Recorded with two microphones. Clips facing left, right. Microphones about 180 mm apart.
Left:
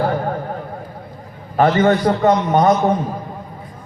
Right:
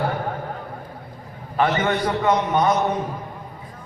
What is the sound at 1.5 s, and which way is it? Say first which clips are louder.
A man's voice: left 7 dB; 45° left (ahead or behind).